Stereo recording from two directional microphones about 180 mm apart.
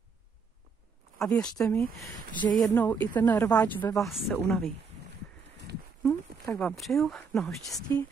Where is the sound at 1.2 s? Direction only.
5° left (ahead or behind).